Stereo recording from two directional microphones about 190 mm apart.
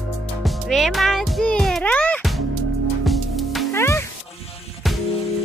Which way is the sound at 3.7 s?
15° left (ahead or behind).